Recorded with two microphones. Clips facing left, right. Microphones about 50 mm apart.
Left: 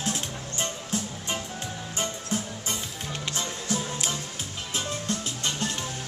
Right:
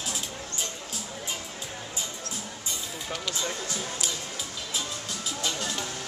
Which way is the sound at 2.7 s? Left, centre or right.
Left.